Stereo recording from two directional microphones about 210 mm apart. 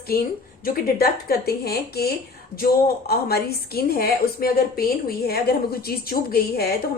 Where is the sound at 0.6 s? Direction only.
45° left (ahead or behind).